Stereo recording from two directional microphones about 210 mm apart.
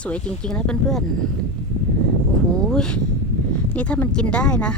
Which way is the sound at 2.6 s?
5° left (ahead or behind).